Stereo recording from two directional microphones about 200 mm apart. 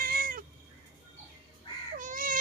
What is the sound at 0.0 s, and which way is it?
Cat, 45° right (ahead or behind).